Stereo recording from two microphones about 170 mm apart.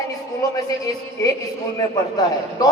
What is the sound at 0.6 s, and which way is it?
Speech, 20° left (ahead or behind).